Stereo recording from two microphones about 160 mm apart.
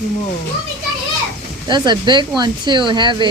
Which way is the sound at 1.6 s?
30° right (ahead or behind).